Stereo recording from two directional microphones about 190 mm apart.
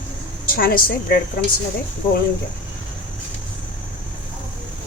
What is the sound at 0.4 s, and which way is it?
Speech, 50° left (ahead or behind).